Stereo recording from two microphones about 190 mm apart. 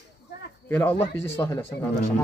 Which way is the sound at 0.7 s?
10° left (ahead or behind).